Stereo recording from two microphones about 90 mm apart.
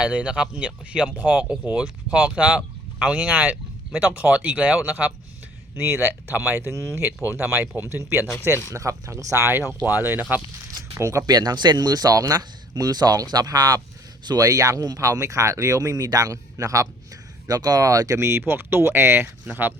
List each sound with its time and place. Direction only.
0.0 s speech: 10° right (ahead or behind)
11.0 s speech: 35° right (ahead or behind)
11.3 s speech: 50° right (ahead or behind); by 19.7 s 20° right (ahead or behind)